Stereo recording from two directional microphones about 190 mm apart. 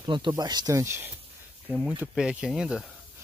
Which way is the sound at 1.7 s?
Centre (ahead or behind).